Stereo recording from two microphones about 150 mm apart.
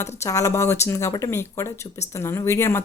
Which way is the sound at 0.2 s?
20° left (ahead or behind).